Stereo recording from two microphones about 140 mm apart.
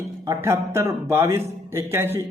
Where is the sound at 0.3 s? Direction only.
20° right (ahead or behind).